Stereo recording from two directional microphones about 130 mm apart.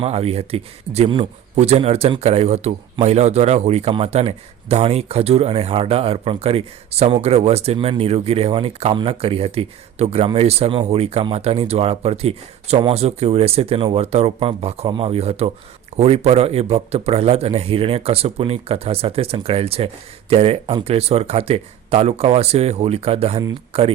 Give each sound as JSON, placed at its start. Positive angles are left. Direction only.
{"t": 0.0, "sound": "a man's voice", "side_deg": -50}